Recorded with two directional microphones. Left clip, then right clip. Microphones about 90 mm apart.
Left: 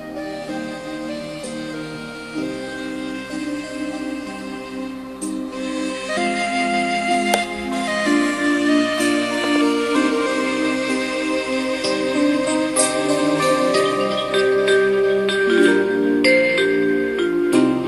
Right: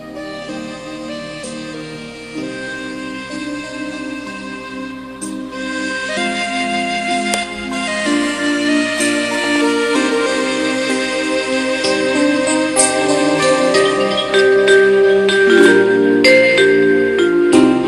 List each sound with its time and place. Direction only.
5.7 s music: 45° right (ahead or behind)